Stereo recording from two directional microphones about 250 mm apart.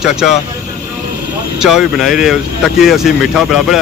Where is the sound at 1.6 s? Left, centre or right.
Centre.